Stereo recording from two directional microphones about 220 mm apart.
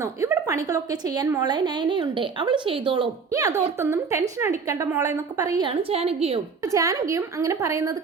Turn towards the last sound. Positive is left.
turn(degrees=-15)  # may be behind; listen again after turning